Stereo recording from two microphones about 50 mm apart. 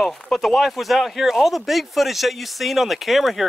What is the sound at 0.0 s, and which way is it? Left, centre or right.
Speech, centre.